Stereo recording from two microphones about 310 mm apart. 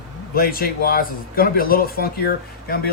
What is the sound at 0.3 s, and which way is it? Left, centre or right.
A man's voice, left.